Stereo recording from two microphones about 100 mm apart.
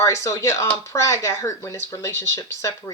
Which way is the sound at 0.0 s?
30° left (ahead or behind).